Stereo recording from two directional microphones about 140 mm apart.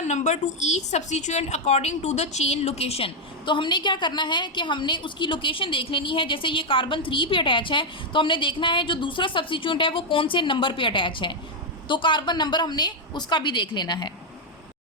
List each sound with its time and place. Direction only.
0.0 s a woman's voice: 55° left (ahead or behind); by 14.1 s 35° left (ahead or behind)